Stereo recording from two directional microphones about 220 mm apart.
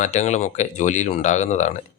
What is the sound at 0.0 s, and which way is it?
Speech, 30° left (ahead or behind).